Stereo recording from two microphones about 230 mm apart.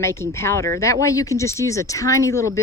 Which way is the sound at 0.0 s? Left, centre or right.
Centre.